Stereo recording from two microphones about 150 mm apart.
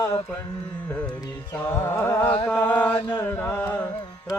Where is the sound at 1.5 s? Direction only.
10° left (ahead or behind).